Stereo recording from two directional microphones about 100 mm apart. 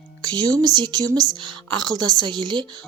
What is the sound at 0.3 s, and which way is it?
A woman's voice, 40° right (ahead or behind).